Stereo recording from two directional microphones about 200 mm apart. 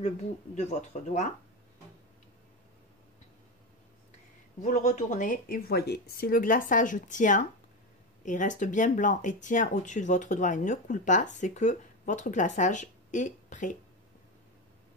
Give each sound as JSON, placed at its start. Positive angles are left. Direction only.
{"t": 0.0, "sound": "speech", "side_deg": 35}
{"t": 4.6, "sound": "speech", "side_deg": 35}